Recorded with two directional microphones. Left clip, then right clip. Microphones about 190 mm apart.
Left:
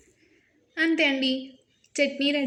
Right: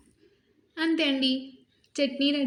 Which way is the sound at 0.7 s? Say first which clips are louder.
Left 3 dB; 30° right (ahead or behind).